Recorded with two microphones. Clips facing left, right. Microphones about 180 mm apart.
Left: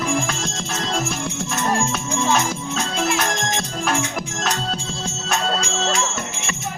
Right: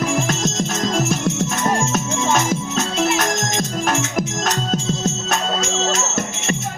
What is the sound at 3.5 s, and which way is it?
Music, 40° right (ahead or behind).